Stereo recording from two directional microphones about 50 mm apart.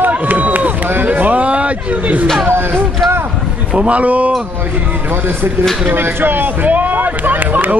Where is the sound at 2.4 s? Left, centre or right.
Right.